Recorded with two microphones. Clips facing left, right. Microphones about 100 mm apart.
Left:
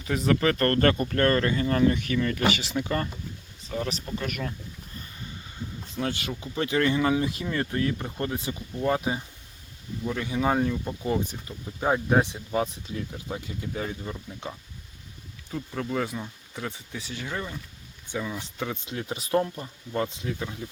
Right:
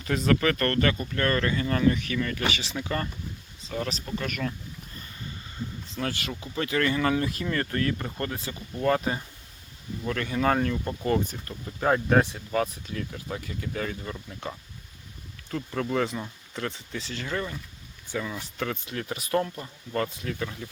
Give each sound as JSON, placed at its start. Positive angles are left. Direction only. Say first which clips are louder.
{"t": 0.0, "sound": "speech", "louder": "even", "side_deg": 15}
{"t": 1.2, "sound": "speech", "louder": "left 2 dB", "side_deg": 30}
{"t": 4.2, "sound": "speech", "louder": "right 1 dB", "side_deg": 20}
{"t": 6.0, "sound": "speech", "louder": "left 2 dB", "side_deg": 20}
{"t": 15.4, "sound": "speech", "louder": "right 2 dB", "side_deg": 5}